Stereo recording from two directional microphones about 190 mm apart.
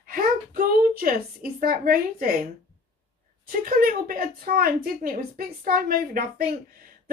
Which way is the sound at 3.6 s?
50° right (ahead or behind).